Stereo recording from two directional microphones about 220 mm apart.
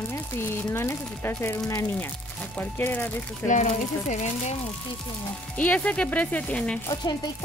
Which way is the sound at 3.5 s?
35° left (ahead or behind).